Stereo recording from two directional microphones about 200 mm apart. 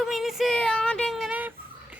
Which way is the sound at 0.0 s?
Centre (ahead or behind).